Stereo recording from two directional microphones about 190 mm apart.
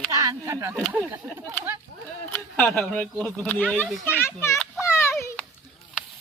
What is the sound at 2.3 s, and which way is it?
Speech, centre (ahead or behind).